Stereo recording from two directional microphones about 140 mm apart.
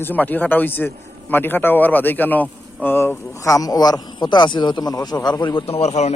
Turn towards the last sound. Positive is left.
turn(degrees=50)  # may be behind; listen again after turning